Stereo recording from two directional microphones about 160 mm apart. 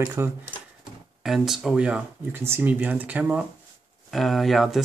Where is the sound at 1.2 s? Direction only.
Centre (ahead or behind).